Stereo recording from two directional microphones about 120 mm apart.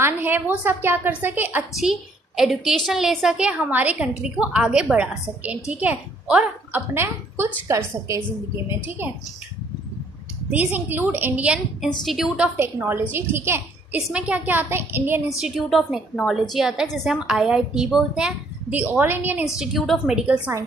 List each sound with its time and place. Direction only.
0.0 s a woman's voice: 15° right (ahead or behind)
1.8 s a woman's voice: centre (ahead or behind); by 7.5 s 20° right (ahead or behind)
8.6 s a woman's voice: 20° right (ahead or behind)
10.5 s a woman's voice: 15° right (ahead or behind)
12.5 s a woman's voice: 20° right (ahead or behind)
15.2 s a woman's voice: 5° right (ahead or behind)
19.4 s a woman's voice: centre (ahead or behind)